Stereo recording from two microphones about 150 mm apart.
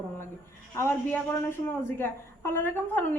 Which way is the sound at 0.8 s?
15° left (ahead or behind).